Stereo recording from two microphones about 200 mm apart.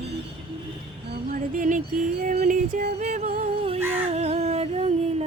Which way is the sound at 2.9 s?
35° right (ahead or behind).